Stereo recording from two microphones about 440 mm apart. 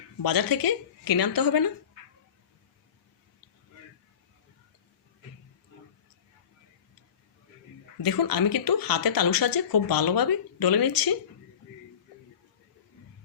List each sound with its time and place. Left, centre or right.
0.2 s speech: left
8.0 s speech: left